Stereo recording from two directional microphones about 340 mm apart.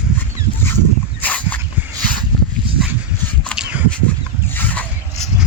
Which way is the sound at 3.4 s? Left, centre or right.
Centre.